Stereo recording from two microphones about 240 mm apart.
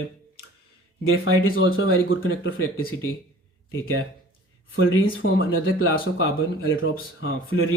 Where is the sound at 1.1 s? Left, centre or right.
Left.